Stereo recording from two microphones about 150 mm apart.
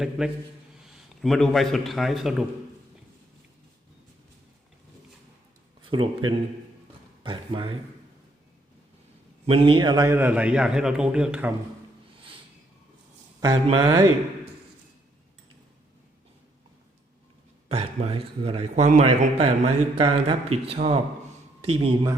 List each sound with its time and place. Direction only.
0.2 s a man's voice: centre (ahead or behind)
5.9 s a man's voice: 30° right (ahead or behind)
9.5 s a man's voice: 35° right (ahead or behind); by 11.5 s 10° right (ahead or behind)
13.4 s speech: 30° right (ahead or behind)
17.7 s a man's voice: 40° right (ahead or behind)